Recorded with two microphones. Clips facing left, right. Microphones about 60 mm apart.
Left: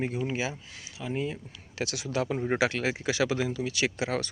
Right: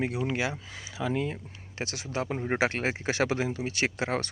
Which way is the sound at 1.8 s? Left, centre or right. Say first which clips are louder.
Left 2 dB; right.